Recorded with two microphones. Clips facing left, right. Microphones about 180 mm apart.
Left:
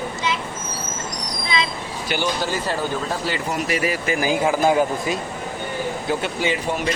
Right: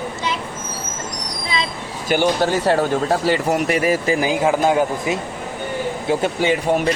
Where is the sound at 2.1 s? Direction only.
60° right (ahead or behind).